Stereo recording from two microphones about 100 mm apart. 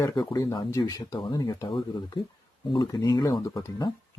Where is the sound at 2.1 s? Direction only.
45° left (ahead or behind).